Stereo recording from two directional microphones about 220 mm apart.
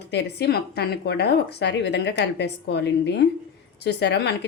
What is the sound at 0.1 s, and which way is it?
A woman's voice, 50° left (ahead or behind).